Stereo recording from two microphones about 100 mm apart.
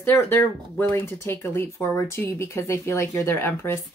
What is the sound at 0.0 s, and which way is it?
Speech, 20° left (ahead or behind).